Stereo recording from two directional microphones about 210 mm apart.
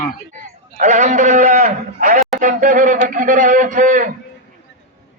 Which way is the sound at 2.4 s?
40° right (ahead or behind).